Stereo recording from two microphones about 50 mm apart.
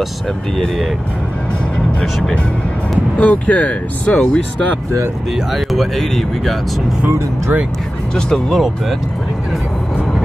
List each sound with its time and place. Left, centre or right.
3.2 s speech: left
5.5 s speech: centre
8.5 s speech: centre